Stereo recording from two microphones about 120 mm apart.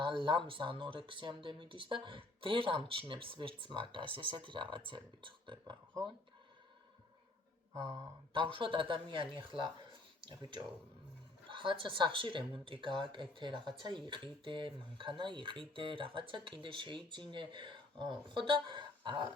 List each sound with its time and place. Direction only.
0.0 s speech: 45° right (ahead or behind)
8.3 s speech: 45° right (ahead or behind)
10.2 s speech: 40° right (ahead or behind)